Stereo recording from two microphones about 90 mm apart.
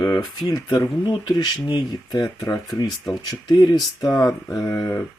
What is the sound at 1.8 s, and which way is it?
Speech, 50° left (ahead or behind).